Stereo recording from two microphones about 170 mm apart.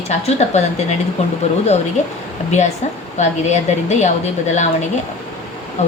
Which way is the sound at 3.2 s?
45° left (ahead or behind).